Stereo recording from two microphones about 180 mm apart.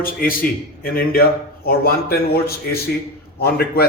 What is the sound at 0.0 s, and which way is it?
A man's voice, 55° left (ahead or behind).